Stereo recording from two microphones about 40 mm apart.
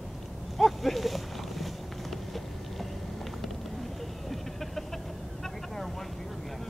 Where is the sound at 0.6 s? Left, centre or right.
Centre.